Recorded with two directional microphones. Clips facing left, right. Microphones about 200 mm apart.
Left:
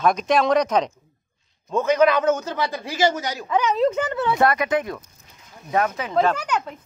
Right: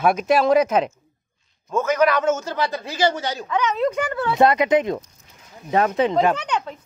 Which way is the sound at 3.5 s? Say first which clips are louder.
Left 2 dB; 30° left (ahead or behind).